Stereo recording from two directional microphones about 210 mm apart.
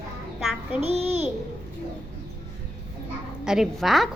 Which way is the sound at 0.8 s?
30° right (ahead or behind).